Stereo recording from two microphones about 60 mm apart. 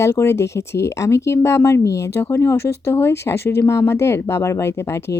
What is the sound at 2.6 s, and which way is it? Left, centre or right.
Speech, left.